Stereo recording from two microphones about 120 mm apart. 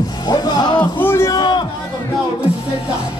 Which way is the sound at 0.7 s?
15° left (ahead or behind).